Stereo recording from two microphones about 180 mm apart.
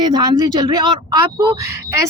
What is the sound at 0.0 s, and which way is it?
A woman's voice, 20° right (ahead or behind).